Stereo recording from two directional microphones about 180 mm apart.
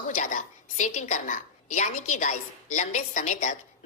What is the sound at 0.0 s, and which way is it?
A woman's voice, 45° left (ahead or behind).